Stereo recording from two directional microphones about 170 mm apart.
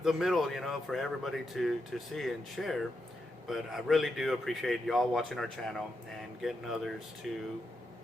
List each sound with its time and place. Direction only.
0.0 s speech: centre (ahead or behind)